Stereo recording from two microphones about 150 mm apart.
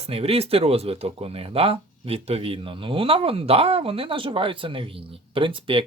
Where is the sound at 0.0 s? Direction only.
40° right (ahead or behind).